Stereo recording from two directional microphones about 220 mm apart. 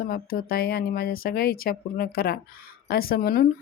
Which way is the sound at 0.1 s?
40° left (ahead or behind).